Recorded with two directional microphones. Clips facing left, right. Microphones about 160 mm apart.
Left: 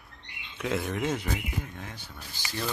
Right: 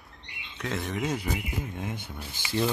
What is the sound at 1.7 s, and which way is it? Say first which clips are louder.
Speech: right 7 dB; 20° right (ahead or behind).